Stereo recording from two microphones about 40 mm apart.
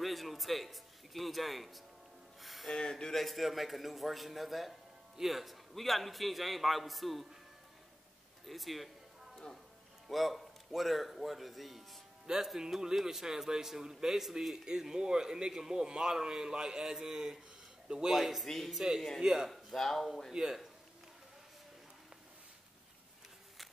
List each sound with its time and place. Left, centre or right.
0.0 s a man's voice: centre
2.4 s music: centre
2.7 s speech: centre
3.2 s a man's voice: centre
8.5 s a man's voice: centre
10.0 s a man's voice: centre
12.5 s a man's voice: centre
18.1 s a man's voice: centre
19.2 s a man's voice: centre
19.5 s speech: centre
20.4 s a man's voice: centre